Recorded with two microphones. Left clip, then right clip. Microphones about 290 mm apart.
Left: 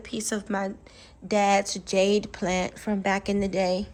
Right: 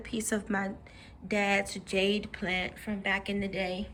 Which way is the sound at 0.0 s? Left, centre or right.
Centre.